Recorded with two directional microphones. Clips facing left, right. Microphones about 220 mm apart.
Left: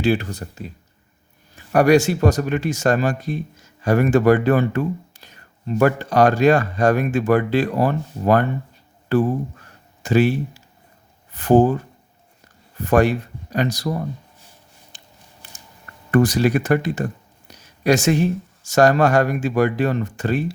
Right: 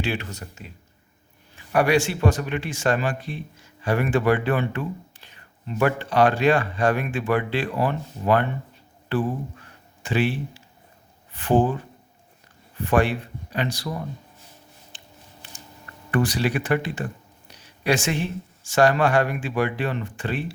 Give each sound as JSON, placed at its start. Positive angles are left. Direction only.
{"t": 0.0, "sound": "speech", "side_deg": 35}
{"t": 12.8, "sound": "speech", "side_deg": 40}
{"t": 14.9, "sound": "a sound", "side_deg": 40}
{"t": 16.1, "sound": "speech", "side_deg": 45}